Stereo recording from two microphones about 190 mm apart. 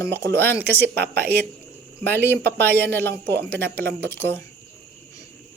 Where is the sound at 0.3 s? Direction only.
10° left (ahead or behind).